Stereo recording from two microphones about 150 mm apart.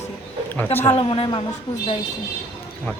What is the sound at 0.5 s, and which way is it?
Speech, 15° left (ahead or behind).